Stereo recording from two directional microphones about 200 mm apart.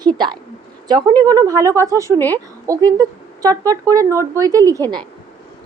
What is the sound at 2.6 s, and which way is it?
A woman's voice, 15° right (ahead or behind).